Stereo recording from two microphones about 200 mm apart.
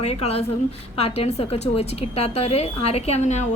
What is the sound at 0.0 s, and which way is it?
Speech, 30° left (ahead or behind).